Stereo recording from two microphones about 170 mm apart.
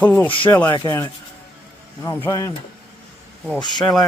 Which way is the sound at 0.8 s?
25° left (ahead or behind).